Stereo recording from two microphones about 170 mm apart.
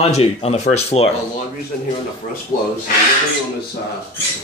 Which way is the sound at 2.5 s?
50° left (ahead or behind).